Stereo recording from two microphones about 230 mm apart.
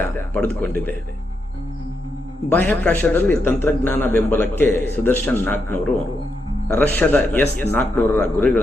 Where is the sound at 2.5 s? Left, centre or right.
Centre.